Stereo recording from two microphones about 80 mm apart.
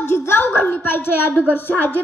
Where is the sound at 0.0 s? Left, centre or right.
Left.